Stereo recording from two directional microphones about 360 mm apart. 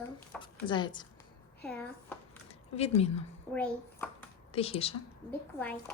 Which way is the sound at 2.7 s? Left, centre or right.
Centre.